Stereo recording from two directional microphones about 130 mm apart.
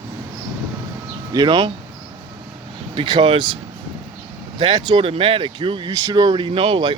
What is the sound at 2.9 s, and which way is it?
Speech, 40° right (ahead or behind).